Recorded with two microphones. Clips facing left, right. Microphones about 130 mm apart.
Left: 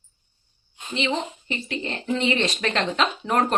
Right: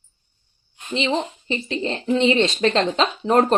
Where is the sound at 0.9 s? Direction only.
30° right (ahead or behind).